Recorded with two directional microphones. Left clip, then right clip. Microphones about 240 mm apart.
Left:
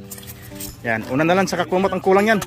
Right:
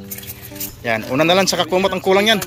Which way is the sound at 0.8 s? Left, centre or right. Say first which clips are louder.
Right 3 dB; centre.